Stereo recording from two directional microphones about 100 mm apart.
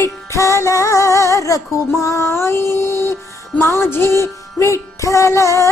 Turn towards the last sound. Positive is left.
turn(degrees=30)  # may be behind; listen again after turning